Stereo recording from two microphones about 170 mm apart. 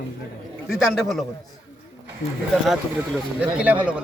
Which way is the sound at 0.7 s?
Centre (ahead or behind).